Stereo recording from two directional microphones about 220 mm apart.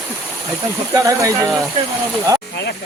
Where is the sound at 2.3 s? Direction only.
15° right (ahead or behind).